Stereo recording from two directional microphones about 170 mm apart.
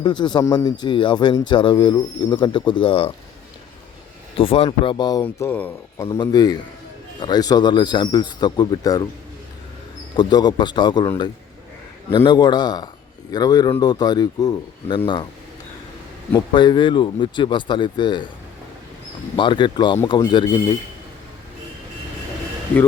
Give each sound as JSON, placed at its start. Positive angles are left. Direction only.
{"t": 0.0, "sound": "speech", "side_deg": 25}
{"t": 4.4, "sound": "speech", "side_deg": 35}
{"t": 5.2, "sound": "speech", "side_deg": 10}
{"t": 10.2, "sound": "speech", "side_deg": 25}
{"t": 12.1, "sound": "speech", "side_deg": 25}
{"t": 16.3, "sound": "speech", "side_deg": 25}
{"t": 19.4, "sound": "speech", "side_deg": 30}